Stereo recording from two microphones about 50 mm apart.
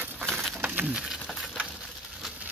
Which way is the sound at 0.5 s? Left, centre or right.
Right.